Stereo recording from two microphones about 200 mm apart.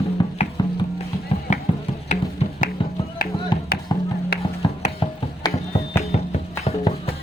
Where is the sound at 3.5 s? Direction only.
20° left (ahead or behind).